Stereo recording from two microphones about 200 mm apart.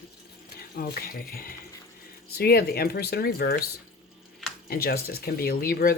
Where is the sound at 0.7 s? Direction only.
50° left (ahead or behind).